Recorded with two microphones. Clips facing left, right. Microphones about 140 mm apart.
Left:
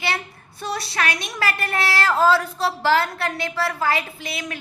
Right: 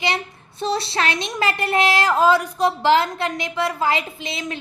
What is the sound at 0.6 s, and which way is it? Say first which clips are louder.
A woman's voice: right 4 dB; 25° right (ahead or behind).